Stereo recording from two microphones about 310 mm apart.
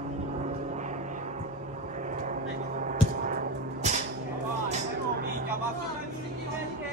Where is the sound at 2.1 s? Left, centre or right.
Right.